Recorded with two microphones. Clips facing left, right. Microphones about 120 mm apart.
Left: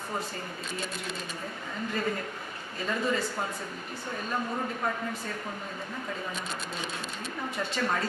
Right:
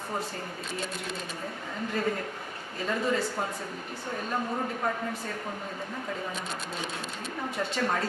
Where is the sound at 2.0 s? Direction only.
40° right (ahead or behind).